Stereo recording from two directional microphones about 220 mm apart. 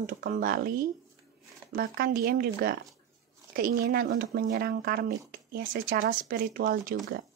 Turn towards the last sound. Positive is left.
turn(degrees=-45)  # may be behind; listen again after turning